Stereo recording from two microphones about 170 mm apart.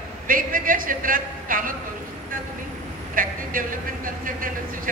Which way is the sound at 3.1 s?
55° right (ahead or behind).